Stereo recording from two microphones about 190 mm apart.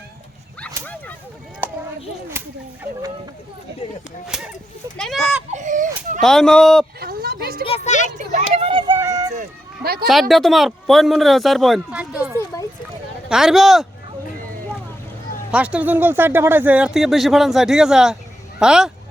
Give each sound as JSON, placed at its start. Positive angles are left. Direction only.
{"t": 1.6, "sound": "clip-clop", "side_deg": -10}
{"t": 2.3, "sound": "whip", "side_deg": -10}
{"t": 4.3, "sound": "a sound", "side_deg": -5}
{"t": 4.9, "sound": "children playing", "side_deg": 0}
{"t": 5.5, "sound": "baby cry", "side_deg": -40}
{"t": 6.1, "sound": "speech", "side_deg": 0}
{"t": 7.0, "sound": "a sound", "side_deg": -55}
{"t": 7.6, "sound": "a sound", "side_deg": 35}
{"t": 8.3, "sound": "a sound", "side_deg": -35}
{"t": 9.3, "sound": "run", "side_deg": -45}
{"t": 10.1, "sound": "speech", "side_deg": 0}
{"t": 15.5, "sound": "speech", "side_deg": -5}